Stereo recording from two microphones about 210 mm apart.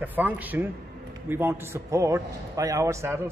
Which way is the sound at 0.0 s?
10° right (ahead or behind).